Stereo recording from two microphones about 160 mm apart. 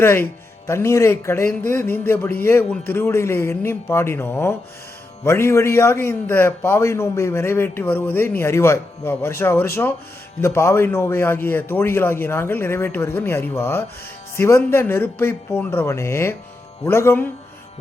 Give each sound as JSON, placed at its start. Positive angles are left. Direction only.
{"t": 0.0, "sound": "a man's voice", "side_deg": 15}